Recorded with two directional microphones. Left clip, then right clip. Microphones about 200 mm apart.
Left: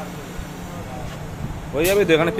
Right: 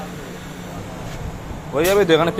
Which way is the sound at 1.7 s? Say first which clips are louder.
Right 2 dB; centre (ahead or behind).